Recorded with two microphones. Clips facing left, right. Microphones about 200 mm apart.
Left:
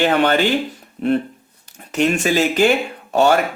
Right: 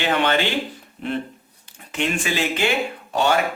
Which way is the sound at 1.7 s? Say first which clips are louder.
Left 7 dB; 40° left (ahead or behind).